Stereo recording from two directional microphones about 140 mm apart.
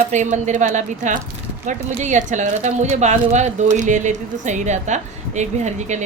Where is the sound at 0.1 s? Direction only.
60° right (ahead or behind).